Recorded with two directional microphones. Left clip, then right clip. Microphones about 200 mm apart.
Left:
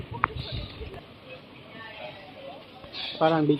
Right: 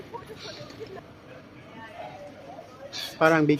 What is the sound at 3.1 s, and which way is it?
Speech, 20° right (ahead or behind).